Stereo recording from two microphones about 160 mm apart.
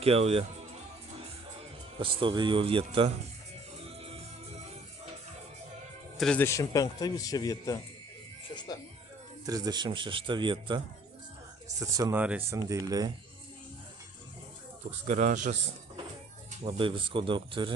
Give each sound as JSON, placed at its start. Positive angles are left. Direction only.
{"t": 0.0, "sound": "speech", "side_deg": -40}
{"t": 2.0, "sound": "speech", "side_deg": -35}
{"t": 6.1, "sound": "speech", "side_deg": 5}
{"t": 6.4, "sound": "a man's voice", "side_deg": 20}
{"t": 8.5, "sound": "music", "side_deg": 25}
{"t": 9.5, "sound": "a man's voice", "side_deg": -25}
{"t": 12.1, "sound": "speech", "side_deg": -10}
{"t": 12.5, "sound": "a man's voice", "side_deg": -20}
{"t": 14.8, "sound": "a man's voice", "side_deg": -45}
{"t": 16.6, "sound": "speech", "side_deg": -30}